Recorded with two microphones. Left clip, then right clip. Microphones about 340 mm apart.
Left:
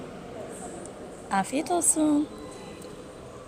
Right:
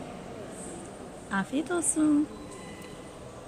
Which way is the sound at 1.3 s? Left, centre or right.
Centre.